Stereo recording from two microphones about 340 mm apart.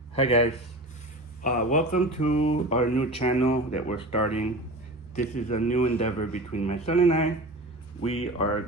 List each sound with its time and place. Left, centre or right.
0.2 s a man's voice: centre